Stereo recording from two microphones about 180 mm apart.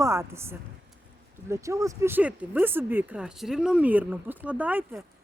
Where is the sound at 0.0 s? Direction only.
15° right (ahead or behind).